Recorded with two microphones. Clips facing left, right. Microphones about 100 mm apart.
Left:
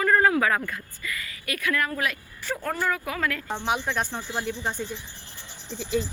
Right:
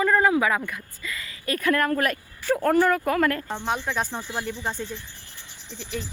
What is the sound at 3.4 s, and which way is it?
Speech, 5° left (ahead or behind).